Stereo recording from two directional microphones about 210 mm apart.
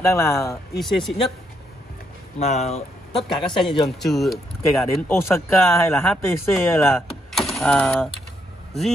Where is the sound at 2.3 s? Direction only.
30° left (ahead or behind).